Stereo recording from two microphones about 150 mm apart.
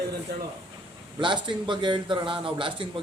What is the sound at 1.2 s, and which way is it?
A man's voice, 30° right (ahead or behind).